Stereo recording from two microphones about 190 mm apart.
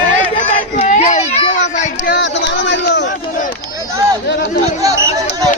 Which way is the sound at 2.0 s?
65° left (ahead or behind).